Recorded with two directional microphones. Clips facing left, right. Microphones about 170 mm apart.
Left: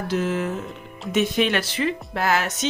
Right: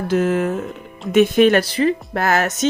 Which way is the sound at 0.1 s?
50° right (ahead or behind).